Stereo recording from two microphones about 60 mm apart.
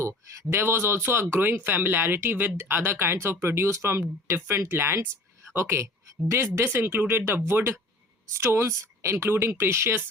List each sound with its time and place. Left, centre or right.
0.0 s speech: right
6.7 s speech: right